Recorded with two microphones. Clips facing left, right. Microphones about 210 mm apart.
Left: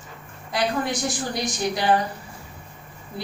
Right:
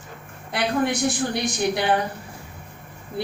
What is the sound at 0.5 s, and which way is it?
A man's voice, 60° right (ahead or behind).